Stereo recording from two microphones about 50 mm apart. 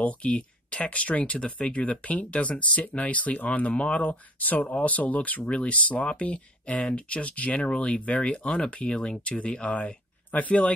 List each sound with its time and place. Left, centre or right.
0.3 s speech: left